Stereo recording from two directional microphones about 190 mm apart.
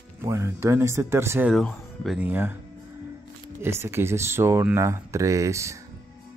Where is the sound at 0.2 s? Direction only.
15° right (ahead or behind).